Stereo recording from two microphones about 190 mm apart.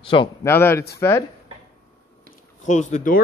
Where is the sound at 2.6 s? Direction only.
40° left (ahead or behind).